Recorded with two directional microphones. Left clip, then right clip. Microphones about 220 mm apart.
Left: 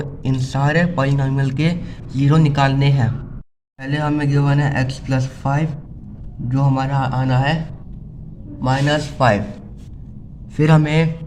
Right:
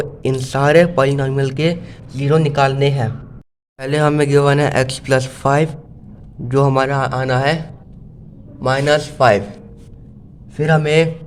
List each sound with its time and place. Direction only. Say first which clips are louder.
0.0 s speech: right 6 dB; 30° right (ahead or behind)
3.8 s speech: right 6 dB; 45° right (ahead or behind)
8.6 s a man's voice: right 4 dB; 35° right (ahead or behind)
9.1 s speech: right 3 dB; 25° right (ahead or behind)
10.6 s a man's voice: right 1 dB; 5° right (ahead or behind)
10.8 s speech: right 6 dB; 20° right (ahead or behind)